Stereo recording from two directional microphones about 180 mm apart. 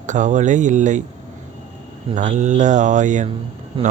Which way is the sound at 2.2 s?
45° right (ahead or behind).